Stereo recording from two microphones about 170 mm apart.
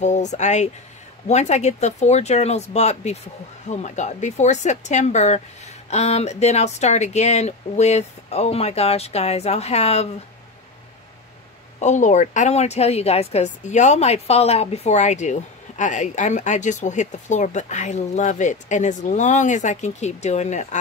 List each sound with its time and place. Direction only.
0.0 s a woman's voice: 45° left (ahead or behind)
11.8 s a woman's voice: 45° left (ahead or behind)